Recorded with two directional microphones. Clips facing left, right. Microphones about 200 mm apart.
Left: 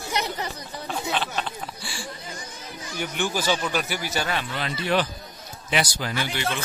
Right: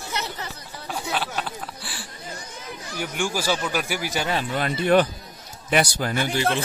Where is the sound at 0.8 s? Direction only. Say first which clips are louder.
Even; 10° right (ahead or behind).